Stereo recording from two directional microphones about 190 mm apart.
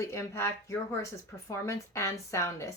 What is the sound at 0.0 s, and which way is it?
Speech, 15° left (ahead or behind).